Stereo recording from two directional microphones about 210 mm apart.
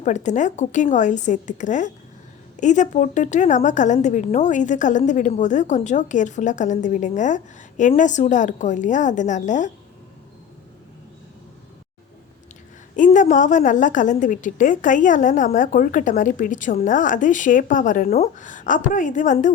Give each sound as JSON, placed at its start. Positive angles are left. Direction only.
{"t": 0.0, "sound": "a woman's voice", "side_deg": 35}
{"t": 13.0, "sound": "a woman's voice", "side_deg": 35}